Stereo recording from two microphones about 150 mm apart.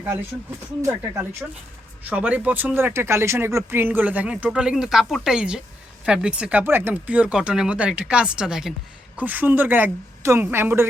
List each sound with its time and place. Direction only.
0.8 s speech: 20° right (ahead or behind)